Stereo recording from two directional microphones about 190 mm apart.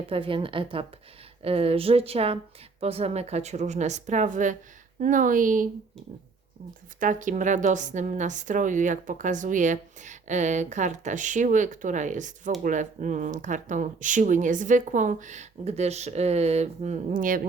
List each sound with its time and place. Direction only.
0.1 s a woman's voice: 25° right (ahead or behind); by 5.6 s 45° right (ahead or behind)
7.0 s a woman's voice: 45° right (ahead or behind)